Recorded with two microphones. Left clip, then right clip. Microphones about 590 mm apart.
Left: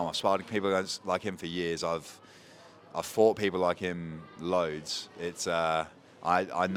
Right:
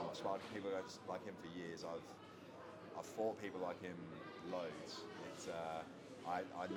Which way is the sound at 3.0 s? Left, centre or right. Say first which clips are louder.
Left 18 dB; left.